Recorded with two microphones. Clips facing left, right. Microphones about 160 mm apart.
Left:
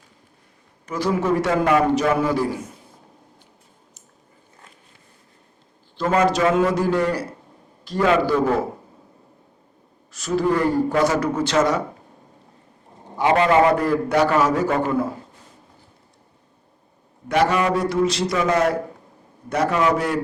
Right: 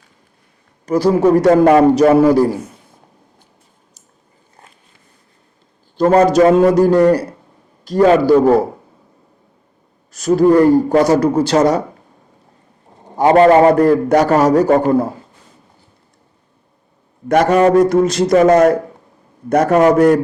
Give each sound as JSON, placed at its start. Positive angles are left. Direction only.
{"t": 0.9, "sound": "a man's voice", "side_deg": -35}
{"t": 6.0, "sound": "a man's voice", "side_deg": -40}
{"t": 10.1, "sound": "a man's voice", "side_deg": -40}
{"t": 13.1, "sound": "a man's voice", "side_deg": -45}
{"t": 17.2, "sound": "a man's voice", "side_deg": -45}